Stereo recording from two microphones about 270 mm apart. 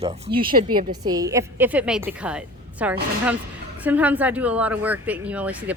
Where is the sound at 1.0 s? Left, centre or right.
Centre.